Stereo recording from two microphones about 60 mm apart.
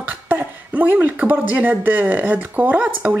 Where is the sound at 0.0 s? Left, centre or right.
Right.